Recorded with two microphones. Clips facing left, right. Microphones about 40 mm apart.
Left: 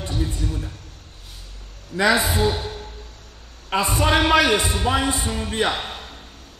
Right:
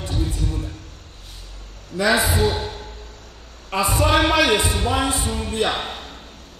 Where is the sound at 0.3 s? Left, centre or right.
Centre.